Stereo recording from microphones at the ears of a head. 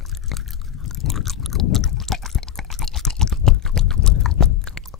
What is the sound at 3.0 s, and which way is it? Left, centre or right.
Chewing, left.